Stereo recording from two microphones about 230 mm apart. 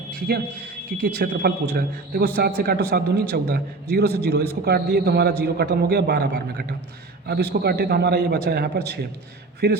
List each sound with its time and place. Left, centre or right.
0.3 s a man's voice: right